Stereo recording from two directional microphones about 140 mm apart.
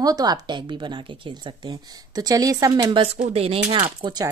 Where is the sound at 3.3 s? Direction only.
45° right (ahead or behind).